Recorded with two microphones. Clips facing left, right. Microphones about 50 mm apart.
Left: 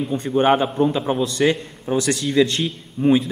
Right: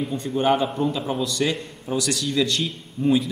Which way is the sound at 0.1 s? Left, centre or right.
Left.